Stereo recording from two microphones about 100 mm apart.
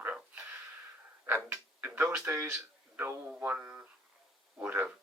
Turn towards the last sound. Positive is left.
turn(degrees=-15)  # may be behind; listen again after turning